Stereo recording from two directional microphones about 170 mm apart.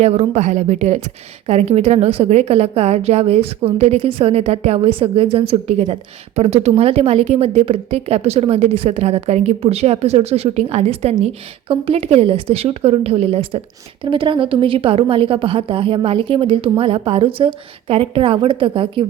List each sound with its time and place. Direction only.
0.0 s a woman's voice: 40° right (ahead or behind)